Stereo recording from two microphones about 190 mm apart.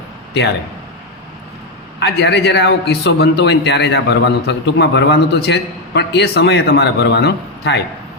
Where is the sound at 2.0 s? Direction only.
60° left (ahead or behind).